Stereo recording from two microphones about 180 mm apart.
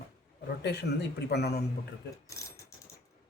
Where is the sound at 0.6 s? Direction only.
65° left (ahead or behind).